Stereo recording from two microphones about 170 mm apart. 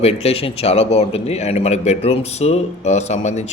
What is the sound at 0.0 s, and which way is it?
A man's voice, 35° left (ahead or behind).